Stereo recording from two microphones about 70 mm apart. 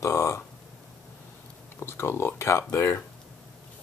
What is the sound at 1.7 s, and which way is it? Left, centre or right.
Speech, left.